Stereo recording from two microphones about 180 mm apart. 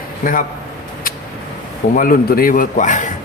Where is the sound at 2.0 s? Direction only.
50° left (ahead or behind).